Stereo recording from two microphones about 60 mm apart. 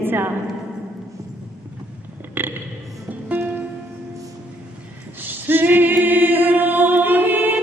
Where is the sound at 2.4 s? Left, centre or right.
Right.